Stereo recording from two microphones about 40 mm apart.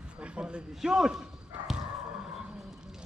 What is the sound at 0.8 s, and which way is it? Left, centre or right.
Speech, centre.